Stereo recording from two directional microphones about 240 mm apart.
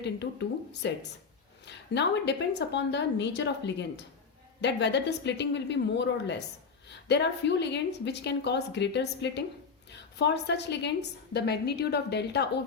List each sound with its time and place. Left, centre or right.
0.0 s a woman's voice: left